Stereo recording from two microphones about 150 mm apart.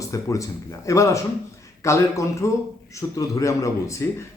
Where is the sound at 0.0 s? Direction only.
20° left (ahead or behind).